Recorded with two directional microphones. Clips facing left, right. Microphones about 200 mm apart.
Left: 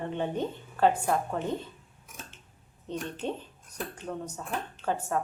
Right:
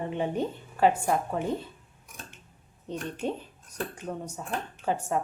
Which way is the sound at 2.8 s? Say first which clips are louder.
Right 2 dB; 10° right (ahead or behind).